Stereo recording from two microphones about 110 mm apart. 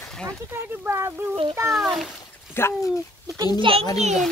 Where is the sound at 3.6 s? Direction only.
55° right (ahead or behind).